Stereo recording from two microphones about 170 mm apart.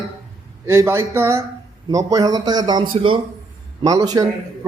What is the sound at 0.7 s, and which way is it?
A man's voice, 15° right (ahead or behind).